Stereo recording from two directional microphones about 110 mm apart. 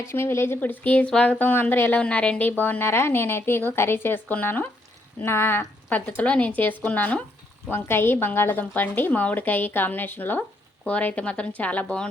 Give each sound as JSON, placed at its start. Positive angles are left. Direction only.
{"t": 0.0, "sound": "a woman's voice", "side_deg": 20}